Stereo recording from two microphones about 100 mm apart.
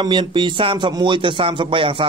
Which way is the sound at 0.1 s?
55° right (ahead or behind).